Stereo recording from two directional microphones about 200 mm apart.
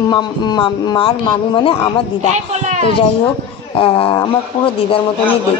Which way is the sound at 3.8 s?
25° left (ahead or behind).